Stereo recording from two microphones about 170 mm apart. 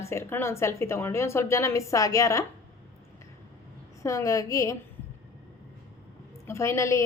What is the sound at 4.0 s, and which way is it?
Speech, 20° left (ahead or behind).